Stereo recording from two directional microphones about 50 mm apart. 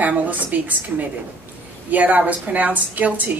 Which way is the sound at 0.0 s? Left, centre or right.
Right.